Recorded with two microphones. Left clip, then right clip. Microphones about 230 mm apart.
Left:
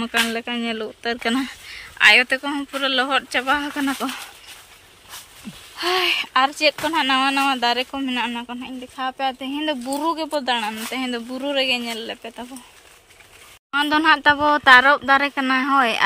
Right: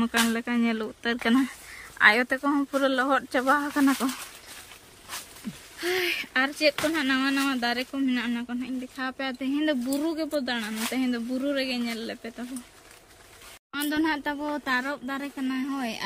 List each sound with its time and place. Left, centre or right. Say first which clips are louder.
0.0 s speech: left 4 dB; centre
2.5 s speech: left 3 dB; right
5.8 s speech: left 8 dB; centre
13.7 s speech: left 11 dB; centre
14.2 s speech: left 15 dB; left